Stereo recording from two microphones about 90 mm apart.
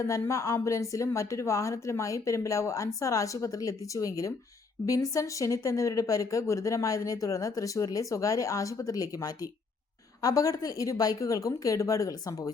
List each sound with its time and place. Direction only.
0.0 s speech: 35° left (ahead or behind)